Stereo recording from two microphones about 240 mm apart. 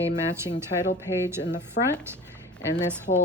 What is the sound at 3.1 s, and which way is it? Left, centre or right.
Speech, left.